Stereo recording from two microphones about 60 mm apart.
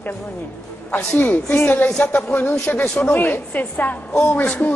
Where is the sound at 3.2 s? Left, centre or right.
Left.